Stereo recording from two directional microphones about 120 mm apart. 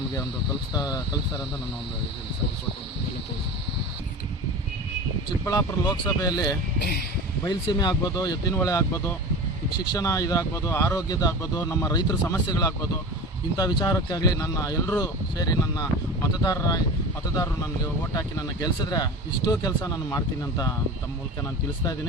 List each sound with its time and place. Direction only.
0.7 s speech: 30° left (ahead or behind)
5.5 s speech: 30° left (ahead or behind)
18.1 s speech: 30° left (ahead or behind)